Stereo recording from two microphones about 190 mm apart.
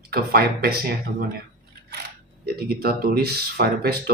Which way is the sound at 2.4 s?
55° right (ahead or behind).